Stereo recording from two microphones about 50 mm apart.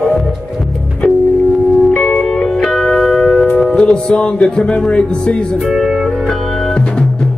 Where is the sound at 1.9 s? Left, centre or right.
Centre.